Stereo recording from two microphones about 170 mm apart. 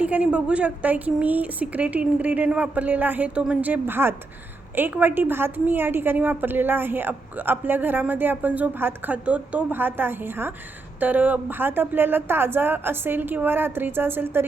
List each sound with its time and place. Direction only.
0.0 s a woman's voice: 5° right (ahead or behind)